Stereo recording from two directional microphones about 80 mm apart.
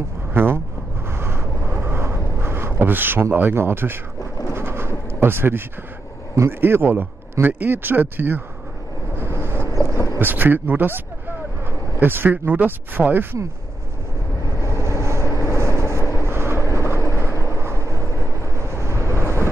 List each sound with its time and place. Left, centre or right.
0.3 s a sound: right
1.0 s vehicle: right
4.6 s a sound: right
6.3 s speech: right
9.2 s vehicle: right
9.7 s vehicle: left
10.1 s speech: right
12.0 s speech: right
14.6 s vehicle: right
18.2 s vehicle: left
18.6 s vehicle: right